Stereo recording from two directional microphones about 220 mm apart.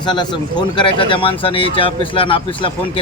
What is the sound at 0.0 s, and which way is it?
Speech, 20° left (ahead or behind).